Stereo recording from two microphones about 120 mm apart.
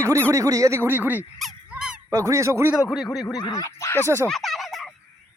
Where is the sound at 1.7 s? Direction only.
10° right (ahead or behind).